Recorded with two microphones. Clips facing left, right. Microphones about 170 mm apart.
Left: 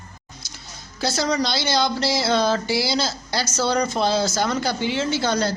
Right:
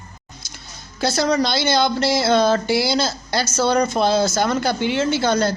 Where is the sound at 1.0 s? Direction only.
55° right (ahead or behind).